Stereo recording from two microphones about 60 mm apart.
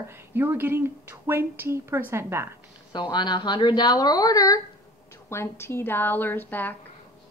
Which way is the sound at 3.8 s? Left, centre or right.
Left.